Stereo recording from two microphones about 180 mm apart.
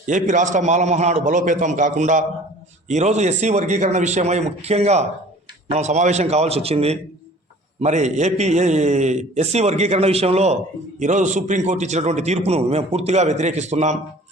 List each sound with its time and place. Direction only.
0.0 s a man's voice: 45° right (ahead or behind)